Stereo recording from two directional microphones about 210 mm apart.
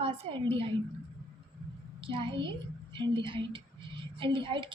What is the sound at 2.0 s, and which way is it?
A woman's voice, 25° right (ahead or behind).